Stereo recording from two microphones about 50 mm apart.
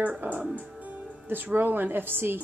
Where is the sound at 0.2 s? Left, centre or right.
Right.